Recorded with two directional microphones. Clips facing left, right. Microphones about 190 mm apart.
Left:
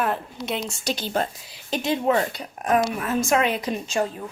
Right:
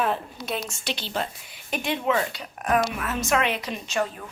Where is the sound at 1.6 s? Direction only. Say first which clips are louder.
Left 3 dB; 30° left (ahead or behind).